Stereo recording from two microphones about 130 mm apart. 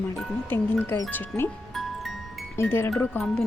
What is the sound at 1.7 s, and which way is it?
Music, centre (ahead or behind).